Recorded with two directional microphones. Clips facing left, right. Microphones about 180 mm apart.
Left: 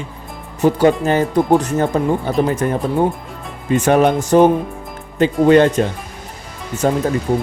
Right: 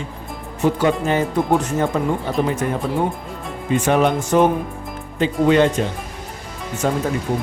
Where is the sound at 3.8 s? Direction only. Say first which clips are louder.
Left 4 dB; 45° left (ahead or behind).